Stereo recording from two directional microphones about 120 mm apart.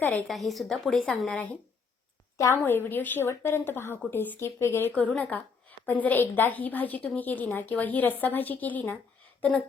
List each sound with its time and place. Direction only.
0.0 s a woman's voice: 15° left (ahead or behind)
0.3 s speech: centre (ahead or behind)
2.6 s a woman's voice: 15° left (ahead or behind)